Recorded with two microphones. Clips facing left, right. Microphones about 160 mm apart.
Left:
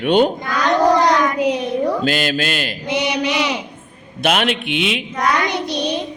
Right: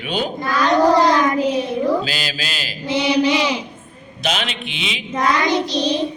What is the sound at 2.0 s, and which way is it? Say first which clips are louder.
Speech: left 8 dB; 50° left (ahead or behind).